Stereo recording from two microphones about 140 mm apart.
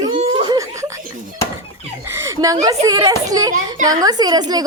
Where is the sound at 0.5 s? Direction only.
25° right (ahead or behind).